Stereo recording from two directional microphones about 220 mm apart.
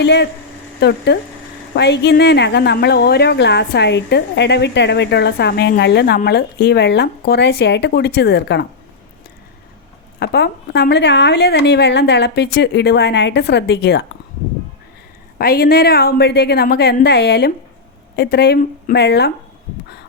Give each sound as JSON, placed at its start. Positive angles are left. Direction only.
{"t": 0.0, "sound": "a woman's voice", "side_deg": 50}
{"t": 10.2, "sound": "a woman's voice", "side_deg": 50}
{"t": 15.4, "sound": "a woman's voice", "side_deg": 40}